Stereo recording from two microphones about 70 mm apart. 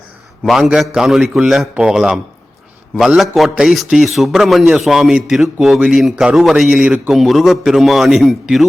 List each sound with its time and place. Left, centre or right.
0.4 s a man's voice: centre
6.8 s a man's voice: right
7.1 s a man's voice: centre